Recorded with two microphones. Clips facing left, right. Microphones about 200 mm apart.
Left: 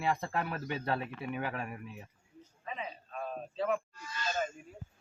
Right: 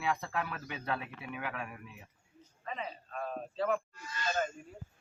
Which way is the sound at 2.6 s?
5° left (ahead or behind).